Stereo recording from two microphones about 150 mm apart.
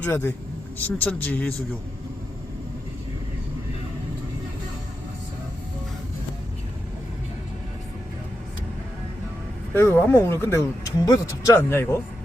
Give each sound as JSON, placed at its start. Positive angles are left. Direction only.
{"t": 0.0, "sound": "speech", "side_deg": 15}
{"t": 9.7, "sound": "speech", "side_deg": 15}